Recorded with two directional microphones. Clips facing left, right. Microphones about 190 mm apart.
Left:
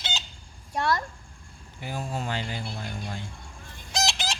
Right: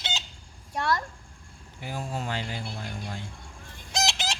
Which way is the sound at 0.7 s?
30° left (ahead or behind).